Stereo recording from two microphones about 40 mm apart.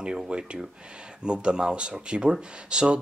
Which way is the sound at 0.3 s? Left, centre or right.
Right.